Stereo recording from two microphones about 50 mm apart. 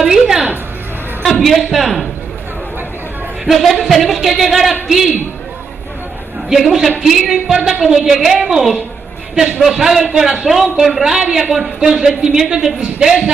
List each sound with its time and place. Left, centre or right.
0.0 s music: centre
1.4 s speech: centre
3.4 s speech: centre
6.5 s speech: centre